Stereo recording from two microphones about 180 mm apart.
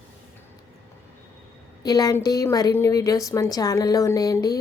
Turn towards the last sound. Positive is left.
turn(degrees=20)  # may be behind; listen again after turning